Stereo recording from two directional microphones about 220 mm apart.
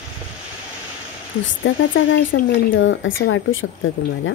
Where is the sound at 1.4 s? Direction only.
60° left (ahead or behind).